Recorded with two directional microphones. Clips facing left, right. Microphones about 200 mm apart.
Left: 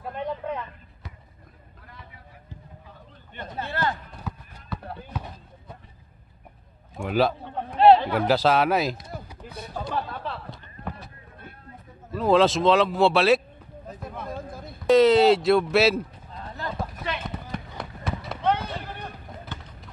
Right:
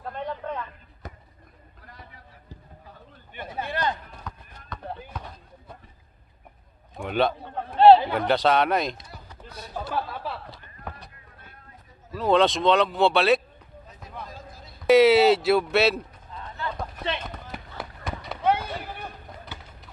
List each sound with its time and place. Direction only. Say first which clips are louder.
0.0 s a sound: left 2 dB; 10° left (ahead or behind)
1.0 s a sound: right 4 dB; 45° right (ahead or behind)
3.3 s a man's voice: even; 10° right (ahead or behind)
4.2 s run: left 4 dB; 5° left (ahead or behind)
5.1 s speech: left 3 dB; 5° left (ahead or behind)
7.0 s a man's voice: left 1 dB; centre (ahead or behind)
9.8 s a sound: even; 5° right (ahead or behind)
12.1 s a man's voice: left 1 dB; centre (ahead or behind)
14.2 s basketball bounce: left 7 dB; 55° left (ahead or behind)
14.9 s a man's voice: even; 10° right (ahead or behind)
16.3 s run: even; 35° left (ahead or behind)
17.5 s fireworks: left 3 dB; centre (ahead or behind)
18.4 s a sound: right 1 dB; 10° right (ahead or behind)